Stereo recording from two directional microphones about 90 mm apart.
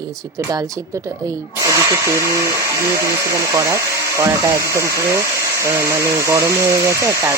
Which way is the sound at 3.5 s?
35° right (ahead or behind).